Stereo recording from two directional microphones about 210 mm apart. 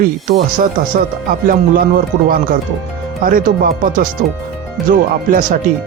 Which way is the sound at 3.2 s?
45° right (ahead or behind).